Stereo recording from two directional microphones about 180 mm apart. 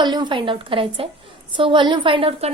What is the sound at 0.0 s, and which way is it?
A woman's voice, 25° right (ahead or behind).